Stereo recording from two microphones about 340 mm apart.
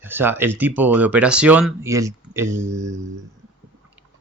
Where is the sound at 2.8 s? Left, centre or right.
Right.